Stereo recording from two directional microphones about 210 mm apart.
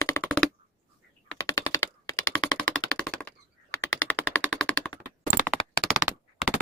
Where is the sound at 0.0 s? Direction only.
10° left (ahead or behind).